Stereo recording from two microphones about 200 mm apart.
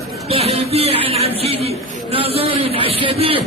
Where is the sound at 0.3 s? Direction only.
30° right (ahead or behind).